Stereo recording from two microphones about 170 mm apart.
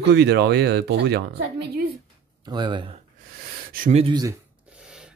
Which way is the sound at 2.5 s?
25° right (ahead or behind).